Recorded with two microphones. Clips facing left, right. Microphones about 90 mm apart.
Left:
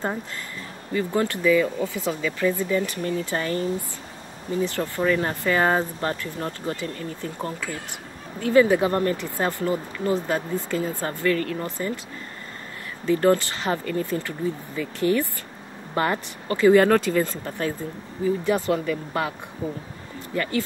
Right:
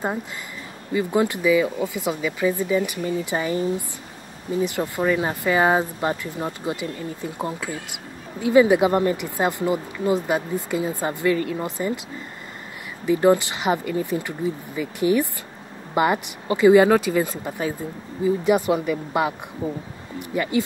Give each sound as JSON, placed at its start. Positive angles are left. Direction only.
{"t": 0.9, "sound": "speech", "side_deg": -15}
{"t": 4.6, "sound": "speech", "side_deg": -15}
{"t": 13.0, "sound": "speech", "side_deg": -15}